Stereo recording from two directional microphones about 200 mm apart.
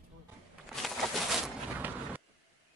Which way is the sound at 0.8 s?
Centre (ahead or behind).